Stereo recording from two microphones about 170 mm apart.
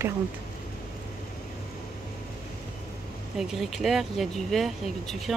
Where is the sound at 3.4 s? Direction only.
Centre (ahead or behind).